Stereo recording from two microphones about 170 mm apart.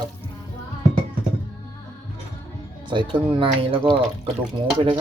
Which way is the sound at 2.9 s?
30° right (ahead or behind).